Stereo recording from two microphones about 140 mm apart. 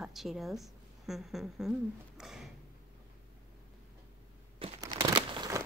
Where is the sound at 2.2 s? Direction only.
5° right (ahead or behind).